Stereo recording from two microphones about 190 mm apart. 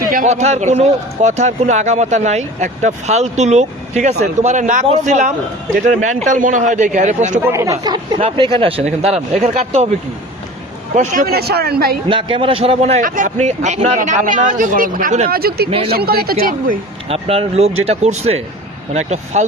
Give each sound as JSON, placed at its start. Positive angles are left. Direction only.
{"t": 0.1, "sound": "speech", "side_deg": -40}
{"t": 7.4, "sound": "speech", "side_deg": -15}
{"t": 8.5, "sound": "speech", "side_deg": -30}
{"t": 10.9, "sound": "speech", "side_deg": -40}
{"t": 12.0, "sound": "speech", "side_deg": -25}
{"t": 15.4, "sound": "speech", "side_deg": -55}
{"t": 17.1, "sound": "speech", "side_deg": -30}